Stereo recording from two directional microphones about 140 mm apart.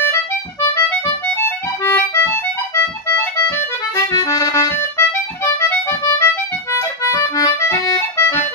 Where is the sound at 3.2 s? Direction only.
15° left (ahead or behind).